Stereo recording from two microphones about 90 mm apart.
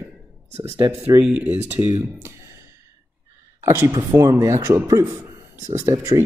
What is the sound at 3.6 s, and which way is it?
Speech, 30° right (ahead or behind).